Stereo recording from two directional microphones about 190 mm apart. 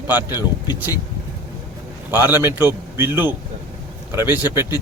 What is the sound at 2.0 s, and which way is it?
A man's voice, 10° right (ahead or behind).